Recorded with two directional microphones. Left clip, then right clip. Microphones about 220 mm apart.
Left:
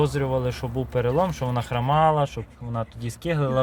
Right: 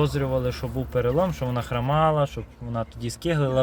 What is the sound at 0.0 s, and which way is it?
Speech, centre (ahead or behind).